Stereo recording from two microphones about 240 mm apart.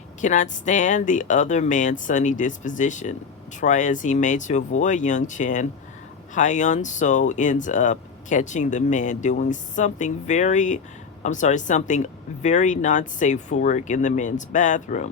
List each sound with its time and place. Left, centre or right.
0.2 s speech: left